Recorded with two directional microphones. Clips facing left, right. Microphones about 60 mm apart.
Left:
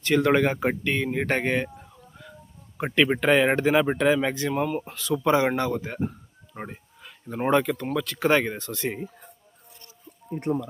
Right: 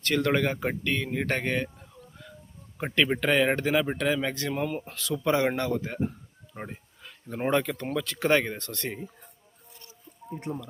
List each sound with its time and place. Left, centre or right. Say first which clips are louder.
0.0 s speech: left 5 dB; centre
2.7 s speech: left 3 dB; centre
10.5 s speech: left 9 dB; left